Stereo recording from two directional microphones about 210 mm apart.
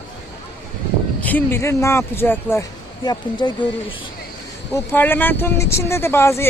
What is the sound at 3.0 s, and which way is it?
Speech, 20° left (ahead or behind).